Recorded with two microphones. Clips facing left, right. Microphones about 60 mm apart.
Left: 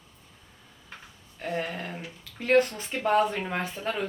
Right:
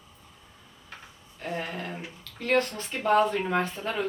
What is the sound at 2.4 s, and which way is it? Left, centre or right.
Speech, centre.